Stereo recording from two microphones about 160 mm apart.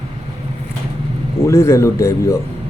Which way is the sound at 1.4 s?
15° left (ahead or behind).